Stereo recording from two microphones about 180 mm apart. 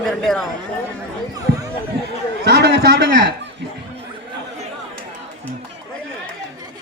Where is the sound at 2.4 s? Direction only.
65° right (ahead or behind).